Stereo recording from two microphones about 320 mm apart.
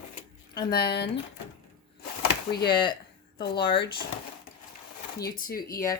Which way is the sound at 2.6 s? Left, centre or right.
Centre.